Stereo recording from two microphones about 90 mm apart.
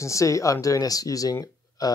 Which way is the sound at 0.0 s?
35° left (ahead or behind).